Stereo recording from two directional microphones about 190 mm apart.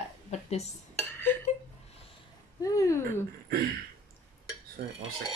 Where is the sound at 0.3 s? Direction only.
35° left (ahead or behind).